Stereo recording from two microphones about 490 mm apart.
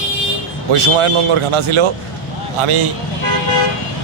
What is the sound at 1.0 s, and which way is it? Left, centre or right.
A man's voice, right.